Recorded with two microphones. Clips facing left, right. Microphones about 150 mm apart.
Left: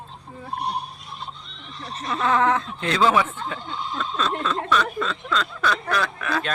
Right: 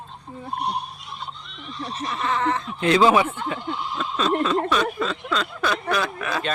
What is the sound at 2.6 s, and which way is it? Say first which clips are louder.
Speech: right 4 dB; 10° right (ahead or behind).